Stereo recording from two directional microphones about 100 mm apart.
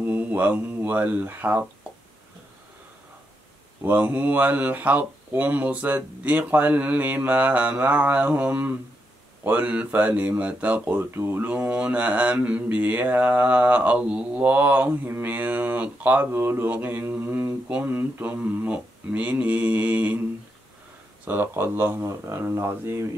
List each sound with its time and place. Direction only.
0.0 s speech: 20° right (ahead or behind)
3.8 s speech: 15° right (ahead or behind)
21.3 s speech: 25° right (ahead or behind)